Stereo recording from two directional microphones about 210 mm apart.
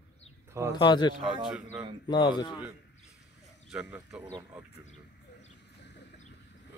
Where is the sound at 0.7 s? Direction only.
20° left (ahead or behind).